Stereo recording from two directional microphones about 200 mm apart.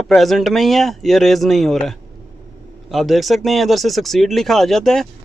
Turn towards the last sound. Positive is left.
turn(degrees=0)  # may be behind; listen again after turning